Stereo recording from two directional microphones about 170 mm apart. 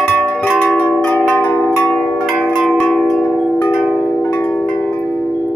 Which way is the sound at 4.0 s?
10° left (ahead or behind).